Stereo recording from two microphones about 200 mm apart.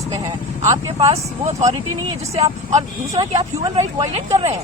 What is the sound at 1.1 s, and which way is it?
Speech, 35° right (ahead or behind).